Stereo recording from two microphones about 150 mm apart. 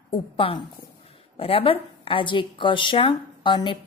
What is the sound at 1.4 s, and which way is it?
A woman's voice, 40° left (ahead or behind).